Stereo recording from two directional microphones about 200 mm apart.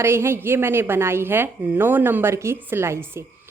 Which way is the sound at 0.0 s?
10° right (ahead or behind).